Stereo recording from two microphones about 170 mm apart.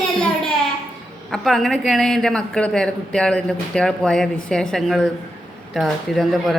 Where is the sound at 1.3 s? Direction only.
Centre (ahead or behind).